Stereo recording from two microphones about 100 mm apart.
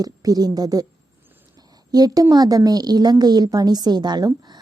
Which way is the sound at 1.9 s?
40° right (ahead or behind).